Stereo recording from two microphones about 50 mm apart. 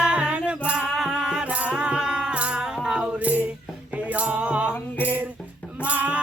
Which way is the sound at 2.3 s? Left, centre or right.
Right.